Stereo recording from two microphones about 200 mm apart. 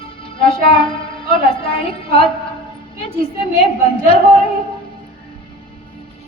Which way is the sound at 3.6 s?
30° left (ahead or behind).